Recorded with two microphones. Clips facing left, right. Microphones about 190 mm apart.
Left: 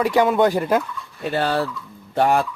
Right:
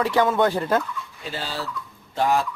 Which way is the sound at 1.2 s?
60° left (ahead or behind).